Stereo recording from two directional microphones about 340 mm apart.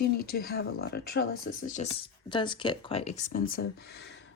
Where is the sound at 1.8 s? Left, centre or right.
Centre.